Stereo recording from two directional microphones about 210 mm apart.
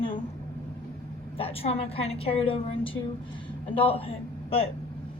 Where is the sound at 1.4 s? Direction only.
30° left (ahead or behind).